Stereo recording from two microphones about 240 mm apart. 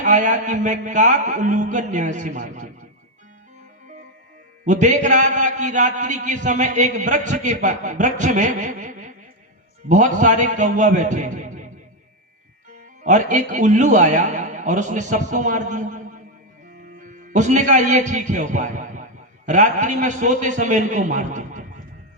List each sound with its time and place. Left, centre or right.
0.0 s a man's voice: right
4.6 s a man's voice: right
13.0 s a man's voice: right